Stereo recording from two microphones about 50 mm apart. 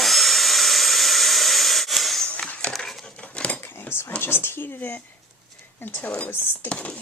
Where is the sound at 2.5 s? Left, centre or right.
Left.